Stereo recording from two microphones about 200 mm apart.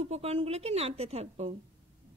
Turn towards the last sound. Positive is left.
turn(degrees=-35)  # may be behind; listen again after turning